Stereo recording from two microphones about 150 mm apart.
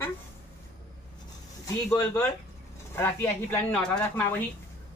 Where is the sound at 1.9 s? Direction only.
25° left (ahead or behind); by 4.0 s 5° left (ahead or behind).